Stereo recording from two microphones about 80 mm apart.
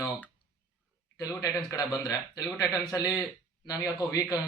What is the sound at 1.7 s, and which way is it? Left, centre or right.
Speech, left.